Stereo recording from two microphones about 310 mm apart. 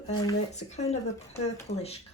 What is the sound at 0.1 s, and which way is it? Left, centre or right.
Speech, centre.